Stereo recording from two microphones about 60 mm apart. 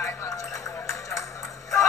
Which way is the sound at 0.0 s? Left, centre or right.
Left.